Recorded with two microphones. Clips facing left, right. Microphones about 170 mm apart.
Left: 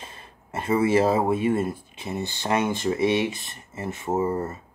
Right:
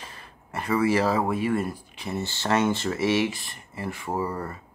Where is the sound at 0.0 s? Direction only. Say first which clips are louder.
Left 1 dB; 25° left (ahead or behind).